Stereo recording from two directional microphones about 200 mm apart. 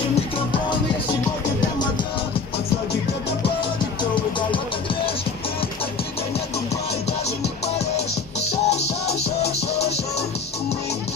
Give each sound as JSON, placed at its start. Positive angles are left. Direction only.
{"t": 8.6, "sound": "music", "side_deg": 30}